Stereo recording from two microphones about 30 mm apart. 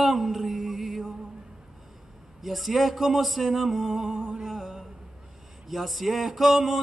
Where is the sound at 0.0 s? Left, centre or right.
Centre.